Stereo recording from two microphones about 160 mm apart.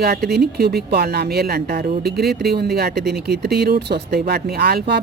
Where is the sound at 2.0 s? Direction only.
80° right.